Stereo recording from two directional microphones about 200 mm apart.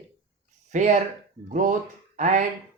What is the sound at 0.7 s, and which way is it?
Speech, 35° right (ahead or behind).